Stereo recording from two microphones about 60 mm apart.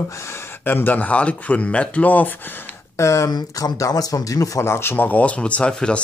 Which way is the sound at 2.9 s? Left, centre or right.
Left.